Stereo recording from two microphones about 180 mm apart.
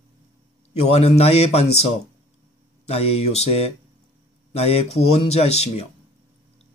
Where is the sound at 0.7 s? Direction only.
35° left (ahead or behind).